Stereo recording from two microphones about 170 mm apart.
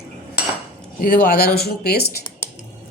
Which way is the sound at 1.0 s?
60° left (ahead or behind).